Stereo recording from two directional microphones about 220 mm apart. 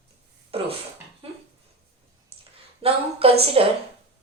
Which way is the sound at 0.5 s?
25° right (ahead or behind).